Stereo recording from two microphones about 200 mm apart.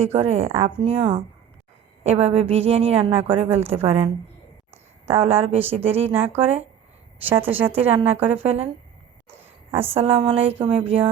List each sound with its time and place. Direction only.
0.0 s a woman's voice: 30° right (ahead or behind)
0.5 s a woman's voice: 15° right (ahead or behind)
0.9 s a woman's voice: 30° right (ahead or behind)
6.1 s a woman's voice: 10° right (ahead or behind)
7.4 s a woman's voice: 30° right (ahead or behind)
7.9 s a woman's voice: 10° right (ahead or behind)
8.3 s a woman's voice: 30° right (ahead or behind)
9.9 s a woman's voice: 30° right (ahead or behind)